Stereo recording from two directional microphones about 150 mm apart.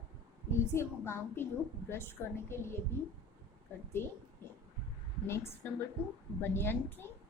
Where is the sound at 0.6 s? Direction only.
15° left (ahead or behind).